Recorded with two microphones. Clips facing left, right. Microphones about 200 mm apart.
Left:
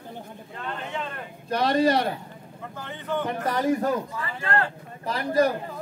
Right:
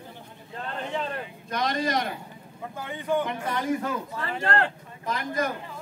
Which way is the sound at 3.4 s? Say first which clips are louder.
Left 4 dB; 35° left (ahead or behind).